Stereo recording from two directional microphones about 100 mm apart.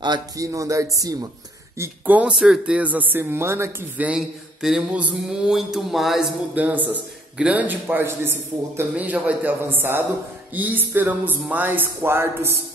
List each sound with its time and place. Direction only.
0.4 s speech: 35° right (ahead or behind)
2.0 s a man's voice: 15° right (ahead or behind)
4.0 s mantra: 10° right (ahead or behind)
6.5 s a man's voice: 15° right (ahead or behind)